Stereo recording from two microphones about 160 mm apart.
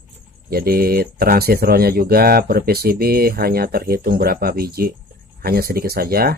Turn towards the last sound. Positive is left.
turn(degrees=-70)  # may be behind; listen again after turning